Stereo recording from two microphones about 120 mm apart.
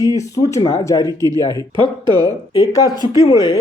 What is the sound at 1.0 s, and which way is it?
Speech, 30° right (ahead or behind).